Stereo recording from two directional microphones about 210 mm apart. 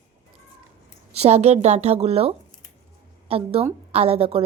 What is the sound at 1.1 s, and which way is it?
A woman's voice, 30° right (ahead or behind).